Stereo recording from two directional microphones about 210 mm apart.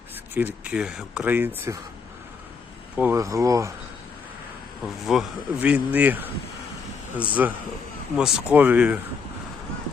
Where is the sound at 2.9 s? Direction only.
10° right (ahead or behind).